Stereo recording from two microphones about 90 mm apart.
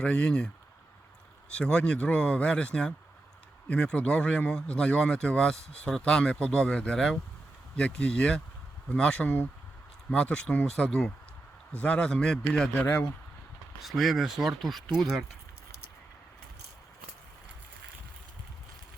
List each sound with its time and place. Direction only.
0.0 s speech: 10° left (ahead or behind)
12.8 s speech: 15° left (ahead or behind)
13.8 s speech: centre (ahead or behind)